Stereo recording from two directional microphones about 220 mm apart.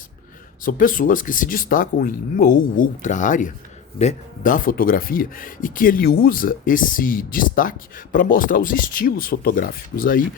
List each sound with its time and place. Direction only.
0.6 s speech: 40° left (ahead or behind)